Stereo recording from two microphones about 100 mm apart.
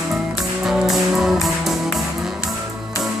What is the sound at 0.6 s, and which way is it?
Music, 5° right (ahead or behind).